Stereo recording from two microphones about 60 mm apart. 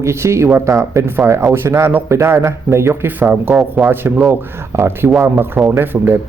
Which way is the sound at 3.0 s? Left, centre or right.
Right.